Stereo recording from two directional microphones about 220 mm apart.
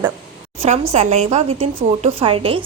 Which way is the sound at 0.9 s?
30° right (ahead or behind).